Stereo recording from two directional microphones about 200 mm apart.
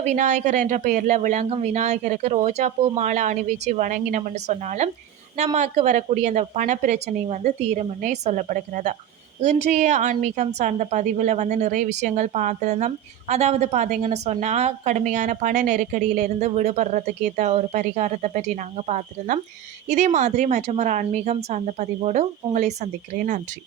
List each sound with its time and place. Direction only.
0.0 s a woman's voice: 35° right (ahead or behind)